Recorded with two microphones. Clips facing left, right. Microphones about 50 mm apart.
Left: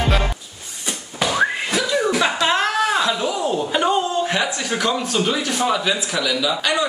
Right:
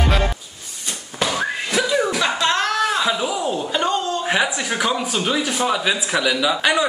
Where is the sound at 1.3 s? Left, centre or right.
Left.